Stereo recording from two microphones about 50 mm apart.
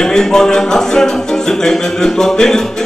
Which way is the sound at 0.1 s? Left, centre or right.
Centre.